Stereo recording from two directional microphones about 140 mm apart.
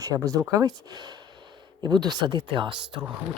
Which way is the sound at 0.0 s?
25° right (ahead or behind).